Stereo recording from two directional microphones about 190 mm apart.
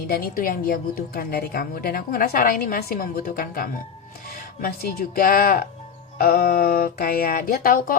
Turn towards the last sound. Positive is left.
turn(degrees=50)  # may be behind; listen again after turning